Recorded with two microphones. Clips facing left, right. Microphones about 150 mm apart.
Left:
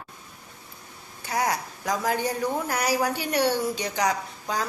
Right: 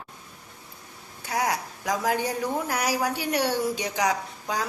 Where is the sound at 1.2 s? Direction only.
5° right (ahead or behind).